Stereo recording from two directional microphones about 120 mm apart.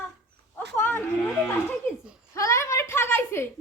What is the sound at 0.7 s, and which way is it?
Speech, 20° left (ahead or behind).